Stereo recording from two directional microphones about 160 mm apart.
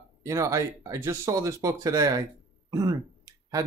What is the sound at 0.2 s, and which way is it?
Speech, 20° right (ahead or behind).